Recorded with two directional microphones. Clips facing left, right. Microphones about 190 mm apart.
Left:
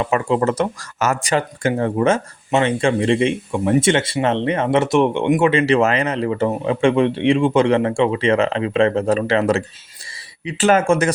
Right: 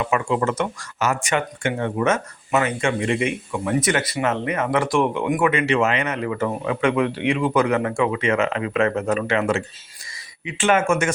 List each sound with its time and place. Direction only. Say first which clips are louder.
0.0 s speech: left 3 dB; 35° left (ahead or behind)